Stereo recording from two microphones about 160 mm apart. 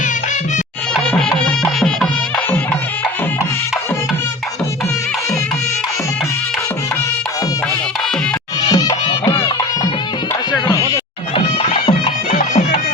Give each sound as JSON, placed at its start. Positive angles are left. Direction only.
{"t": 1.6, "sound": "music", "side_deg": 5}
{"t": 8.7, "sound": "music", "side_deg": 25}
{"t": 10.5, "sound": "music", "side_deg": 25}
{"t": 11.9, "sound": "music", "side_deg": 45}